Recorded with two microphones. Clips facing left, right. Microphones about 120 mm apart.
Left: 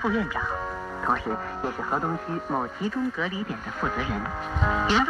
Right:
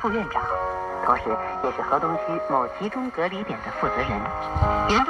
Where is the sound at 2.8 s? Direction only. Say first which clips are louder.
Right 2 dB; 55° right (ahead or behind).